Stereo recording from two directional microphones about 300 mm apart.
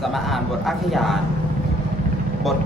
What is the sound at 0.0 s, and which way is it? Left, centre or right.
Speech, centre.